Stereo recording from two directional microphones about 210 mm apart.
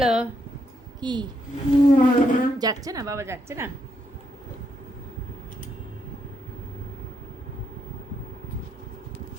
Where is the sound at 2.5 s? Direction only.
15° right (ahead or behind).